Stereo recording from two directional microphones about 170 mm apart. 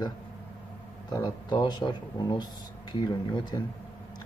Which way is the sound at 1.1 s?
20° left (ahead or behind).